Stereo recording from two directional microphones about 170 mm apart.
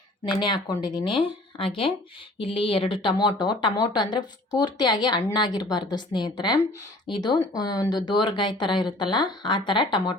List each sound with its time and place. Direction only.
0.3 s a woman's voice: 25° left (ahead or behind)